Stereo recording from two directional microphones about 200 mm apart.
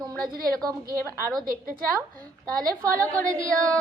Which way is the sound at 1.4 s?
45° right (ahead or behind).